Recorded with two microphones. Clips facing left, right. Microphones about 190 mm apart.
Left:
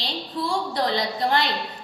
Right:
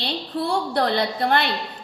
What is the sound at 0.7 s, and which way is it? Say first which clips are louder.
Speech: right 3 dB; 60° right (ahead or behind).